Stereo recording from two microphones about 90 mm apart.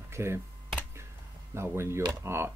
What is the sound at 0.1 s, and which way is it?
Speech, 30° right (ahead or behind).